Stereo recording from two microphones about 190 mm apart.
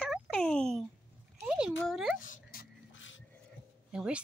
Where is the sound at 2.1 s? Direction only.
45° left (ahead or behind).